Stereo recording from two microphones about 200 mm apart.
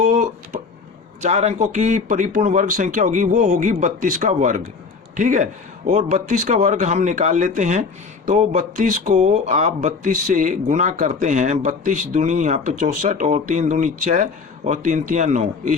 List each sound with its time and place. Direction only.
1.2 s a man's voice: 35° right (ahead or behind)